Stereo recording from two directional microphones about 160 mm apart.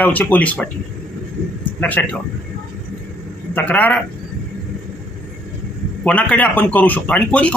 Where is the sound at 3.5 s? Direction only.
10° left (ahead or behind).